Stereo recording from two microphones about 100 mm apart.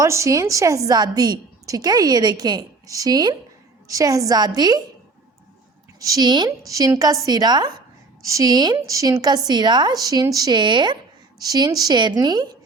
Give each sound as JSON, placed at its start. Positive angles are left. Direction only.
{"t": 0.0, "sound": "a woman's voice", "side_deg": -30}
{"t": 6.0, "sound": "a woman's voice", "side_deg": -35}
{"t": 6.7, "sound": "a woman's voice", "side_deg": -35}
{"t": 8.2, "sound": "a woman's voice", "side_deg": -35}
{"t": 8.7, "sound": "a woman's voice", "side_deg": -30}